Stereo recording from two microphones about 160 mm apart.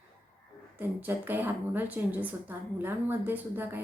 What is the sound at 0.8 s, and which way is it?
A woman's voice, 10° right (ahead or behind).